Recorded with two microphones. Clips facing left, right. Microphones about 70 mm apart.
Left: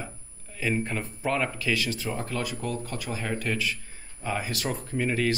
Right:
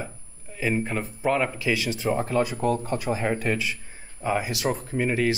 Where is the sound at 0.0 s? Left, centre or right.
Centre.